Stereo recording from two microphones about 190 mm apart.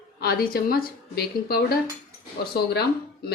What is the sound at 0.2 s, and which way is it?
A woman's voice, 55° left (ahead or behind).